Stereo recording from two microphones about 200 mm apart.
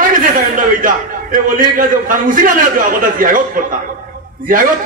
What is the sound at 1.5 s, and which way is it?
A man's voice, 45° right (ahead or behind).